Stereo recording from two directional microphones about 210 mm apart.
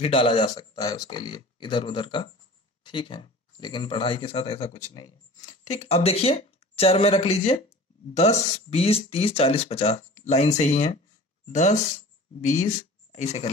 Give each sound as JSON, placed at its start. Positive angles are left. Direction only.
{"t": 0.0, "sound": "speech", "side_deg": 25}